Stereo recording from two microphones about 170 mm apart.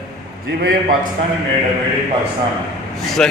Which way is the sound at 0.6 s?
60° right (ahead or behind).